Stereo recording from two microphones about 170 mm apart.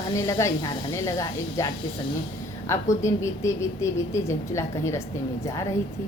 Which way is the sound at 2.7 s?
15° left (ahead or behind).